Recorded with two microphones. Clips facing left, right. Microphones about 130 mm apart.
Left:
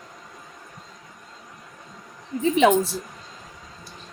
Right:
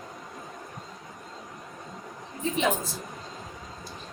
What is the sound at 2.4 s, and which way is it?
Speech, 70° left (ahead or behind).